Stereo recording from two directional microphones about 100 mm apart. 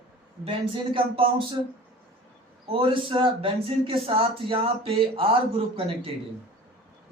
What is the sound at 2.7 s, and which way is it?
Speech, 60° right (ahead or behind).